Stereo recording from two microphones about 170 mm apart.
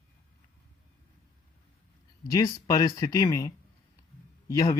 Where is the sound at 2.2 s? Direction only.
20° left (ahead or behind).